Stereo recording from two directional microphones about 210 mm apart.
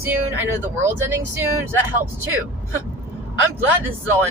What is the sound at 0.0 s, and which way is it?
Speech, 10° right (ahead or behind).